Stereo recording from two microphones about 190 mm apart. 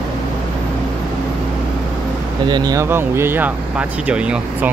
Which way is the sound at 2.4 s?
20° right (ahead or behind).